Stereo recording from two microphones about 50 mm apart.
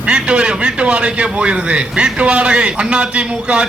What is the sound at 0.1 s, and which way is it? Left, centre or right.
A man's voice, centre.